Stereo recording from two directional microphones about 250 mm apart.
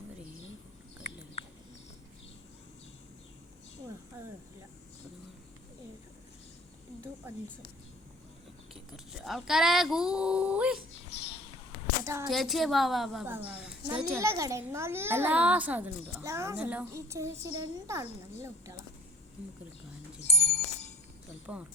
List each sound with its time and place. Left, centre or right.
8.7 s speech: centre
12.0 s a woman's voice: centre
12.3 s a woman's voice: centre
20.3 s a sound: left
21.5 s a woman's voice: centre